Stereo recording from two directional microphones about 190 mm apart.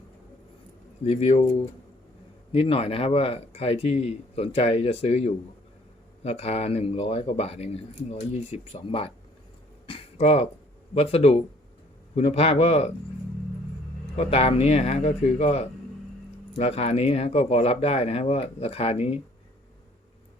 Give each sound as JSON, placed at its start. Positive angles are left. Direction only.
{"t": 1.0, "sound": "speech", "side_deg": 35}
{"t": 14.2, "sound": "speech", "side_deg": 30}